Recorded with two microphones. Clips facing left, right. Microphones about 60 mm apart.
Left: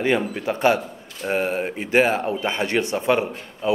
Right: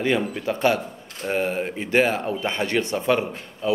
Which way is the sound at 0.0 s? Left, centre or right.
Left.